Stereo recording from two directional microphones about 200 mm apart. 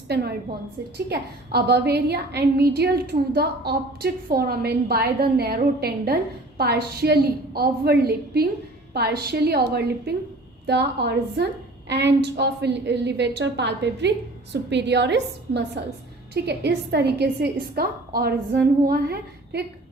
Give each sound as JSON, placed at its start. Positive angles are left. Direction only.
{"t": 0.1, "sound": "a woman's voice", "side_deg": -55}